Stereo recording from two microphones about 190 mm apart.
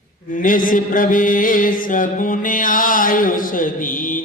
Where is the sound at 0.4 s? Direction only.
45° left (ahead or behind).